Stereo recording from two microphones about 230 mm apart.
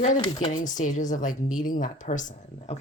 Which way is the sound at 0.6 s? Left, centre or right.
Left.